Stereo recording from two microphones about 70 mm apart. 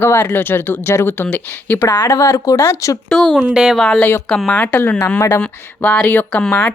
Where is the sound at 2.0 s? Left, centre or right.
Left.